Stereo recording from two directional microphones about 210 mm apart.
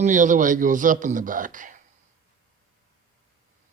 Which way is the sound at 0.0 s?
35° right (ahead or behind).